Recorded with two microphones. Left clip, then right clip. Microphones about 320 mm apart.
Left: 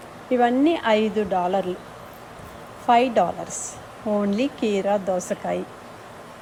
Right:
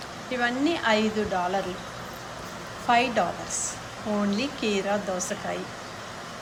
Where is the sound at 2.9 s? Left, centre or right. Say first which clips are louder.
Left 5 dB; left.